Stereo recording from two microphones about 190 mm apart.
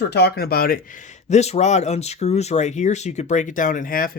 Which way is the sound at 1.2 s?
35° left (ahead or behind).